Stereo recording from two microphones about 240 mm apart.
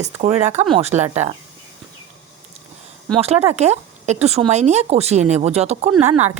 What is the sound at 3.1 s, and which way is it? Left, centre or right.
Speech, right.